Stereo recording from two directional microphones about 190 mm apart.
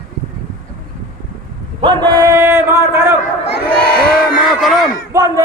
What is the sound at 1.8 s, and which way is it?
Male singing, 25° right (ahead or behind).